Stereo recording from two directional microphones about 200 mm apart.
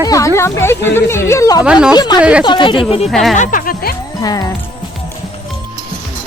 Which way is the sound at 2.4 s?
25° left (ahead or behind).